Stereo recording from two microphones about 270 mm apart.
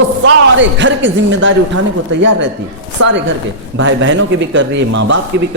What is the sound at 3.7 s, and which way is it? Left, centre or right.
Speech, right.